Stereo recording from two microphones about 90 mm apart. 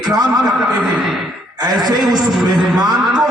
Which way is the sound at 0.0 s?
50° right (ahead or behind).